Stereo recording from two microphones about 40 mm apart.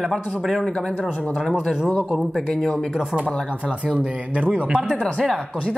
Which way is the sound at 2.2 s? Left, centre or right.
Centre.